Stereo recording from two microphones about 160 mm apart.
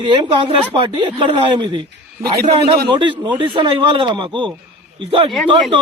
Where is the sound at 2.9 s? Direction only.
30° right (ahead or behind).